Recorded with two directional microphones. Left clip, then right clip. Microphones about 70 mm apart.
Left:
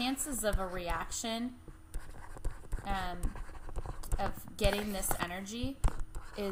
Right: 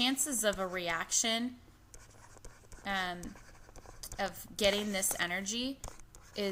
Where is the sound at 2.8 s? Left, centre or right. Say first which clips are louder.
Right 2 dB; right.